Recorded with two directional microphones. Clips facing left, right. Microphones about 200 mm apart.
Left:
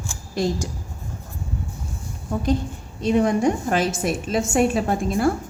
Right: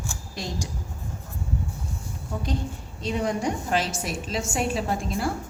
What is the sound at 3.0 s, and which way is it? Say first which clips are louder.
A woman's voice: left 8 dB; 50° left (ahead or behind).